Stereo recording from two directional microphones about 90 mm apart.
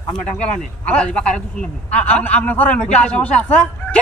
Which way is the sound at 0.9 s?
10° left (ahead or behind).